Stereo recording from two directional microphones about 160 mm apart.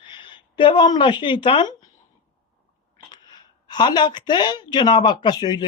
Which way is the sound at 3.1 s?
25° left (ahead or behind).